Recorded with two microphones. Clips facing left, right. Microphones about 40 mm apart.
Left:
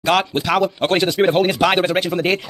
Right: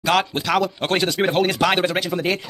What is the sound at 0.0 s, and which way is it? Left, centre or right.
Speech, centre.